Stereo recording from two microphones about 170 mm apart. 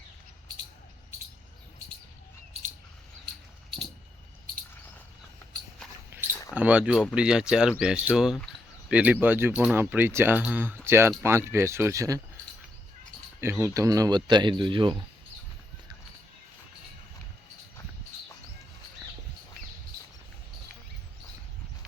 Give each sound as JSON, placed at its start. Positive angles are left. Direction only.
{"t": 2.5, "sound": "a sound", "side_deg": -35}
{"t": 6.5, "sound": "speech", "side_deg": -10}
{"t": 13.4, "sound": "speech", "side_deg": -15}